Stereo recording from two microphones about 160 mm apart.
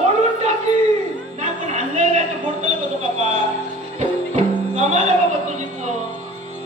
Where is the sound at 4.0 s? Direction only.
45° right (ahead or behind).